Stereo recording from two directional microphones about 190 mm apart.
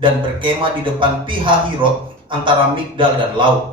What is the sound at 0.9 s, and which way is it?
Speech, 25° right (ahead or behind).